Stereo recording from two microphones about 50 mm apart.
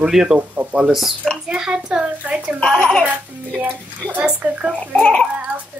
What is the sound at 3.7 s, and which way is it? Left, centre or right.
Speech, right.